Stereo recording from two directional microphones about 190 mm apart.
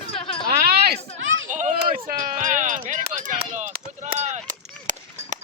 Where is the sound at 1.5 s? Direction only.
40° right (ahead or behind).